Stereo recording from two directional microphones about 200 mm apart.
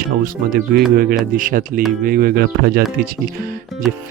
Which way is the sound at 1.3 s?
45° right (ahead or behind).